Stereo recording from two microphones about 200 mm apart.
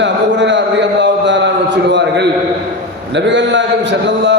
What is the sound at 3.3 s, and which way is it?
A man's voice, 65° right (ahead or behind).